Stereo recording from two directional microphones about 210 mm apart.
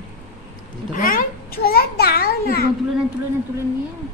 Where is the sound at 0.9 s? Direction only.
40° left (ahead or behind).